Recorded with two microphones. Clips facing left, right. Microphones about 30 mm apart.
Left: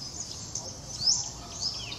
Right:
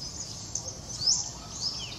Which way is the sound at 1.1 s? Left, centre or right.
Centre.